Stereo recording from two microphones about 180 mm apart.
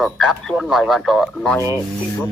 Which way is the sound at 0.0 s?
Centre (ahead or behind).